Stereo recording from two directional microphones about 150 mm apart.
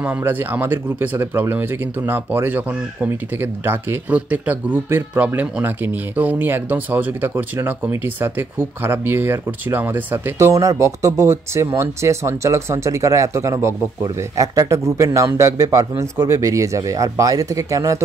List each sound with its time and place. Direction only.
0.0 s speech: 10° right (ahead or behind)